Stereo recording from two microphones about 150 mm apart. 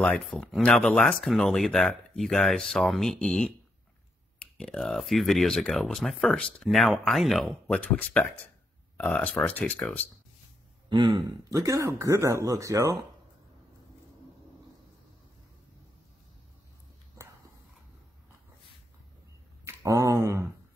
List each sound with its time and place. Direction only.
0.0 s speech: 5° left (ahead or behind)
10.9 s speech: 30° right (ahead or behind)
19.6 s a sound: 20° right (ahead or behind)